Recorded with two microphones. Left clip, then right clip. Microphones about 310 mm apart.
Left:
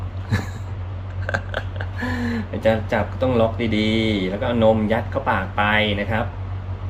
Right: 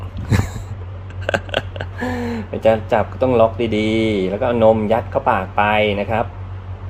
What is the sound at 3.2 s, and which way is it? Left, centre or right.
Speech, centre.